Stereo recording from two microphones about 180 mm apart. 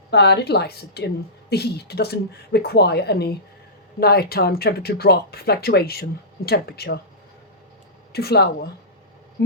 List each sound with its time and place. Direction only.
0.1 s speech: 65° left (ahead or behind)
8.1 s speech: 60° left (ahead or behind)